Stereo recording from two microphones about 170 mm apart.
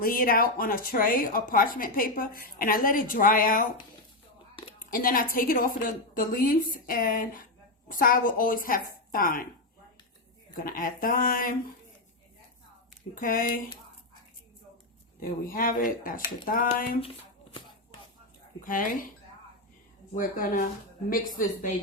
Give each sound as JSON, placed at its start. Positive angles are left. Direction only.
{"t": 0.0, "sound": "speech", "side_deg": 55}
{"t": 4.9, "sound": "speech", "side_deg": 55}
{"t": 10.5, "sound": "speech", "side_deg": 55}
{"t": 13.1, "sound": "a woman's voice", "side_deg": 55}
{"t": 15.2, "sound": "speech", "side_deg": 55}
{"t": 18.6, "sound": "speech", "side_deg": 55}
{"t": 20.1, "sound": "a woman's voice", "side_deg": 55}